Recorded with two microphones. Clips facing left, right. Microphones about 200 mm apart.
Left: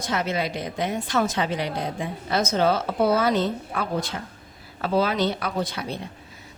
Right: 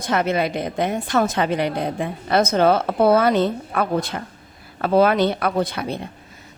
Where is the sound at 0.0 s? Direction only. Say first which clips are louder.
Right 5 dB; 55° right (ahead or behind).